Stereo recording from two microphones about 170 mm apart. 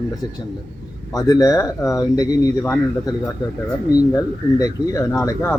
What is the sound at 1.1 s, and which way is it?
Speech, 20° left (ahead or behind).